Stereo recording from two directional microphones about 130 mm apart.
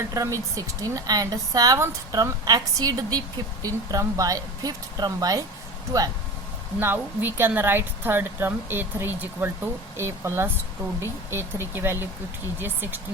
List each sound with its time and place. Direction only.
0.1 s a woman's voice: 25° right (ahead or behind)
6.7 s a woman's voice: 15° right (ahead or behind)